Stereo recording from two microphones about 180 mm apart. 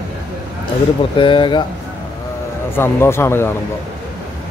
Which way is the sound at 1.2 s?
25° left (ahead or behind).